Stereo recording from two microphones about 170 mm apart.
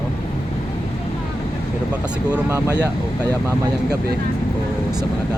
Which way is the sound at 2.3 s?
15° right (ahead or behind).